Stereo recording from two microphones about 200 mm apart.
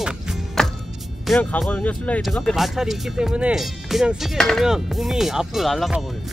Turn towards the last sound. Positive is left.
turn(degrees=0)  # may be behind; listen again after turning